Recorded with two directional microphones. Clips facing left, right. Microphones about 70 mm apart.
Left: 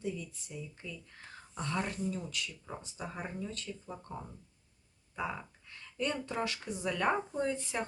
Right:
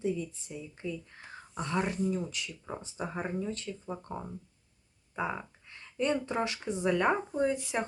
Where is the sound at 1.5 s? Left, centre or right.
Centre.